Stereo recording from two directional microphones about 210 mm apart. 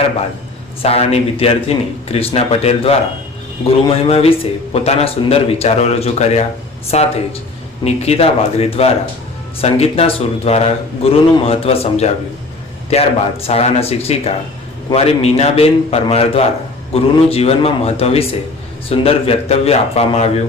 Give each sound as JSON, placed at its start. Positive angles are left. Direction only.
{"t": 0.8, "sound": "a man's voice", "side_deg": 30}